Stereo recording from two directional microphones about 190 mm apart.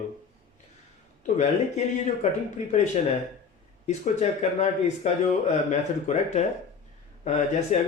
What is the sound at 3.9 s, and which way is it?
Speech, 35° left (ahead or behind).